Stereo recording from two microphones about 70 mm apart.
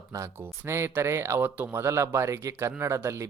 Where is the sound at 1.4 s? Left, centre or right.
Right.